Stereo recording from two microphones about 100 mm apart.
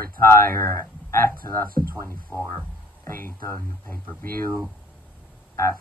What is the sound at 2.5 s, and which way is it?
Speech, 20° left (ahead or behind).